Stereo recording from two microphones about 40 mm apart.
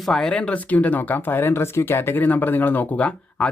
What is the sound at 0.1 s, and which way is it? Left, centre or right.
Speech, centre.